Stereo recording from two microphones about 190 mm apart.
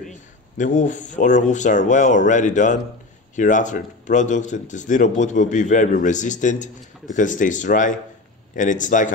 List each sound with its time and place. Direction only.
0.6 s speech: 40° left (ahead or behind)